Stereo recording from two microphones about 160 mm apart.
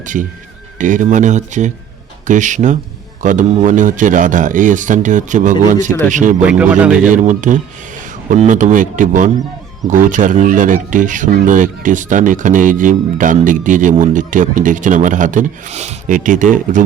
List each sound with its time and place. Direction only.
0.0 s a man's voice: 55° right (ahead or behind)
6.4 s a man's voice: 10° right (ahead or behind)
7.1 s speech: 50° right (ahead or behind)